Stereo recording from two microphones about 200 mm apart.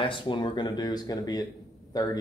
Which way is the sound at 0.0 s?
25° left (ahead or behind).